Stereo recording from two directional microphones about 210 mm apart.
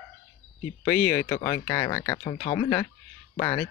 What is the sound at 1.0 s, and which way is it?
Speech, 15° left (ahead or behind).